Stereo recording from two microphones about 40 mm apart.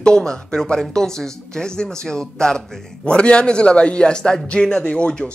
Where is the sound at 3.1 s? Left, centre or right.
Left.